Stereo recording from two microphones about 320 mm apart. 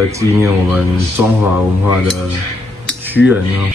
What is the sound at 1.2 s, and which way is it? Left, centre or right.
Cutlery, centre.